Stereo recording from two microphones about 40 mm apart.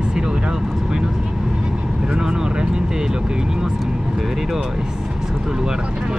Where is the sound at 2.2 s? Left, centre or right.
Centre.